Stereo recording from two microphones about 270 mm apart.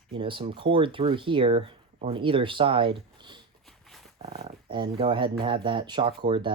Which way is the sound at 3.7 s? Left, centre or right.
Centre.